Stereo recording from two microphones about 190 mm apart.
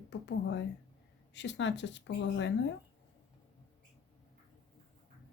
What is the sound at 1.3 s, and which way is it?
Speech, 70° left (ahead or behind).